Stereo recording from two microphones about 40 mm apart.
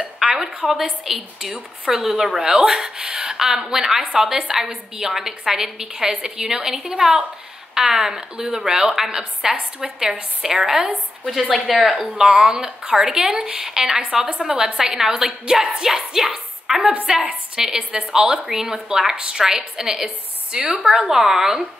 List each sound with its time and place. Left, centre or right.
0.2 s a sound: centre
1.0 s a woman's voice: centre
11.5 s speech: centre
12.2 s a woman's voice: centre
16.8 s a woman's voice: right
17.6 s a woman's voice: centre